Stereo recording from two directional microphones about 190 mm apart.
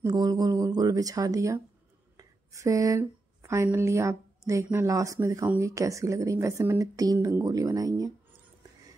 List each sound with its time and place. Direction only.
0.0 s speech: 20° right (ahead or behind)